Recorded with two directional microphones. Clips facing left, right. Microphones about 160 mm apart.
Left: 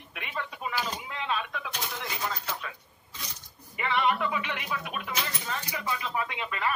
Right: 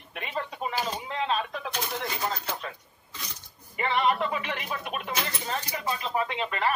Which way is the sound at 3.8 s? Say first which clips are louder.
Right 2 dB; 35° right (ahead or behind).